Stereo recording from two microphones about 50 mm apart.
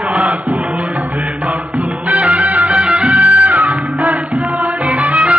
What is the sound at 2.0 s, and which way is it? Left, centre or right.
Music, right.